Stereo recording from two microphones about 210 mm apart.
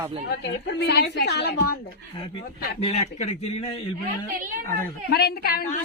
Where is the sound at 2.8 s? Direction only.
30° left (ahead or behind).